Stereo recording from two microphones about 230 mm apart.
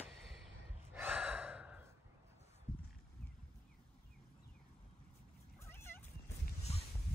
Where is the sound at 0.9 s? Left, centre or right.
Centre.